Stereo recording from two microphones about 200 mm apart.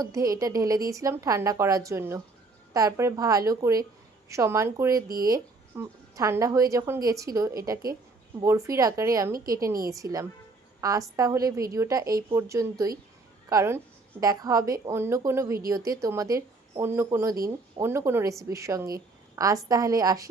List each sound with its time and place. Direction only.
0.0 s speech: 15° right (ahead or behind)